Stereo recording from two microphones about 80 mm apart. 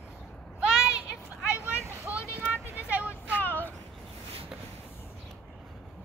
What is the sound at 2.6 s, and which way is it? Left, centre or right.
Vehicle, centre.